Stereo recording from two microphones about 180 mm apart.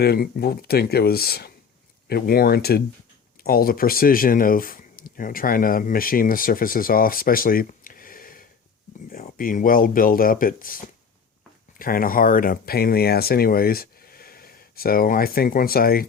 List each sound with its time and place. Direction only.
0.0 s speech: 60° left (ahead or behind)